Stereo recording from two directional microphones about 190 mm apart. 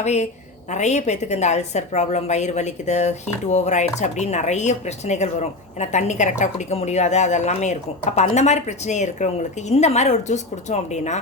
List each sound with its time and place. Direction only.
0.0 s a woman's voice: 35° left (ahead or behind)